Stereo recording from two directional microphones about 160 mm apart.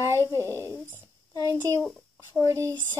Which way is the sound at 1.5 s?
20° right (ahead or behind).